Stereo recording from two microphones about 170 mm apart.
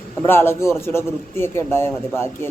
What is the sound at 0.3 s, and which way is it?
A man's voice, 15° left (ahead or behind).